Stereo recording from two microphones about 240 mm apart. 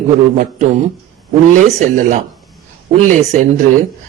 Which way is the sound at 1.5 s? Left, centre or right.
Right.